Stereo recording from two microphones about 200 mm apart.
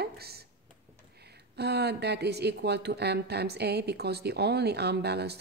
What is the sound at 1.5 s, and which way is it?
A woman's voice, 55° right (ahead or behind).